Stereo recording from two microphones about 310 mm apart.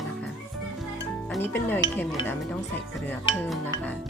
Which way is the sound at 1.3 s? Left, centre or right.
Centre.